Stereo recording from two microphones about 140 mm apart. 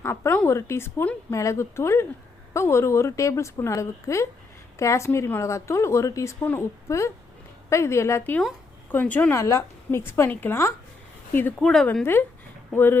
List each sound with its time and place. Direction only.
0.0 s a woman's voice: 15° left (ahead or behind)
12.7 s a woman's voice: 15° left (ahead or behind)